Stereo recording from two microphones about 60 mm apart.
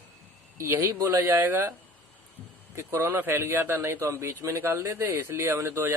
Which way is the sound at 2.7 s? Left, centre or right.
Right.